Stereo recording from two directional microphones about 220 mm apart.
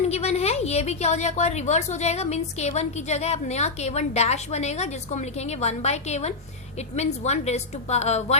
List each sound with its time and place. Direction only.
0.0 s a woman's voice: 30° left (ahead or behind)